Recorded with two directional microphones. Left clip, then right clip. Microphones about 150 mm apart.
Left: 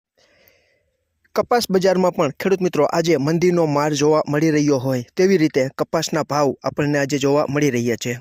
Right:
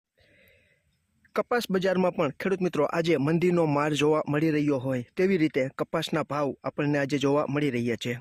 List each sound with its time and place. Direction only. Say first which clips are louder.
1.3 s speech: left 9 dB; 35° left (ahead or behind)
4.4 s speech: left 8 dB; 40° left (ahead or behind)
6.8 s speech: left 6 dB; 30° left (ahead or behind)